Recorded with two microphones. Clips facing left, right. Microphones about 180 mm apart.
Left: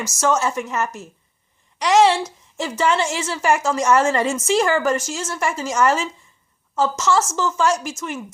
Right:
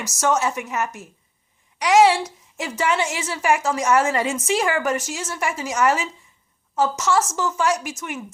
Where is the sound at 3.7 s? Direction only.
10° right (ahead or behind).